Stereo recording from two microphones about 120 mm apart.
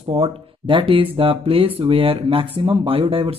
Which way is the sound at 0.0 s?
55° right (ahead or behind).